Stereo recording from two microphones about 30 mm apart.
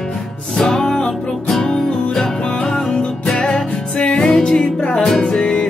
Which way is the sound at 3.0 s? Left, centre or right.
Left.